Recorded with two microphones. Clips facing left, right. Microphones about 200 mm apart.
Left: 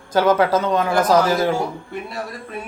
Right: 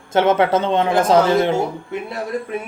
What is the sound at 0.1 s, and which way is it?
A man's voice, 25° right (ahead or behind).